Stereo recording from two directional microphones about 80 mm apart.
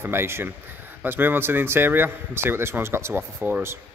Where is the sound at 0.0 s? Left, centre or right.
Right.